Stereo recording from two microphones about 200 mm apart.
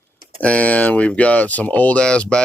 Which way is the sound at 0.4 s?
5° left (ahead or behind).